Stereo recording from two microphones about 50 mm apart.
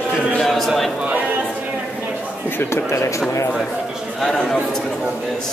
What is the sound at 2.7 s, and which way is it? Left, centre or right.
Speech, left.